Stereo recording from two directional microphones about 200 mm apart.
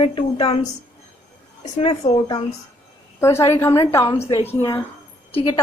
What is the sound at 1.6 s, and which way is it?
Speech, 30° left (ahead or behind).